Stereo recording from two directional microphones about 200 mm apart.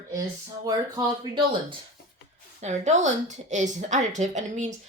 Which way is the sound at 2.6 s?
35° right (ahead or behind).